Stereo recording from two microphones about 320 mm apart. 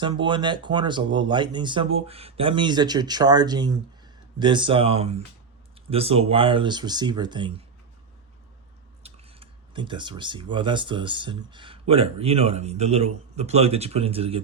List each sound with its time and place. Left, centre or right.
0.0 s speech: centre
9.0 s speech: centre